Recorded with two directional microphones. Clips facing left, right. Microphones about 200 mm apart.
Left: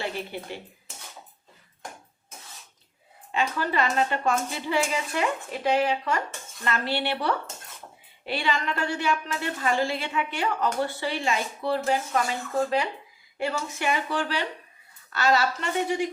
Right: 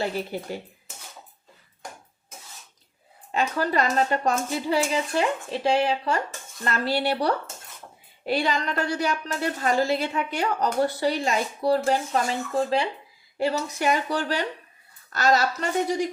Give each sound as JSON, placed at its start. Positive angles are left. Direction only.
{"t": 0.0, "sound": "a woman's voice", "side_deg": -40}
{"t": 3.3, "sound": "a woman's voice", "side_deg": -40}
{"t": 13.4, "sound": "a woman's voice", "side_deg": -35}